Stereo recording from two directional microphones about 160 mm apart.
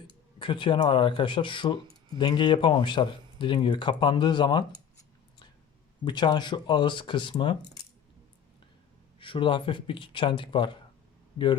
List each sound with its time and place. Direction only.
0.3 s speech: 30° left (ahead or behind)
6.1 s speech: 25° left (ahead or behind)
9.1 s speech: 30° left (ahead or behind)